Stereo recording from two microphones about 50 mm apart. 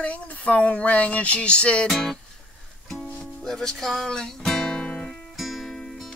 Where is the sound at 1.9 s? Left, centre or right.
Centre.